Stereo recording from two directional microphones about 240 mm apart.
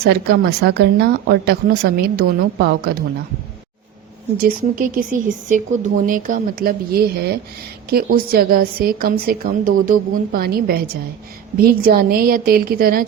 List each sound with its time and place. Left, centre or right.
0.1 s a woman's voice: right
4.4 s a woman's voice: right